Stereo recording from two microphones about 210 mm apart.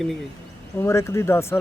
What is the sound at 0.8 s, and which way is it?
Speech, 15° left (ahead or behind).